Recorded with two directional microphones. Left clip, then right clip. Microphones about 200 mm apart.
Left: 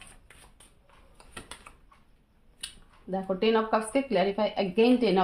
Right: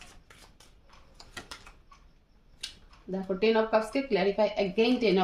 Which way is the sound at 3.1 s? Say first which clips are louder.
Left 1 dB; 25° left (ahead or behind).